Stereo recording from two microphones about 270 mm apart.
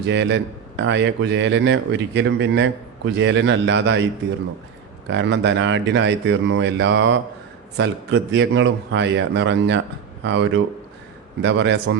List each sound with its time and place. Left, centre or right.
0.0 s a man's voice: right
5.0 s a man's voice: right